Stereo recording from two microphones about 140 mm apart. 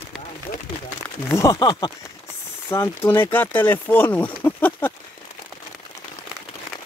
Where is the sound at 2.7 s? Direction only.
20° left (ahead or behind).